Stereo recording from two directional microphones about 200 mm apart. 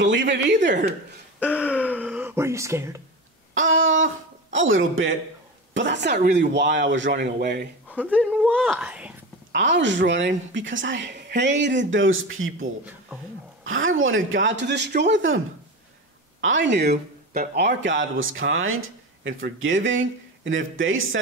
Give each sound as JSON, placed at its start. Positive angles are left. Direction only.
{"t": 0.0, "sound": "a woman's voice", "side_deg": -65}
{"t": 1.4, "sound": "throat clearing", "side_deg": -5}
{"t": 2.0, "sound": "a sound", "side_deg": -10}
{"t": 3.5, "sound": "speech", "side_deg": -75}
{"t": 5.8, "sound": "a woman's voice", "side_deg": -60}
{"t": 8.3, "sound": "speech", "side_deg": -5}
{"t": 9.5, "sound": "a woman's voice", "side_deg": -65}
{"t": 13.7, "sound": "speech", "side_deg": -80}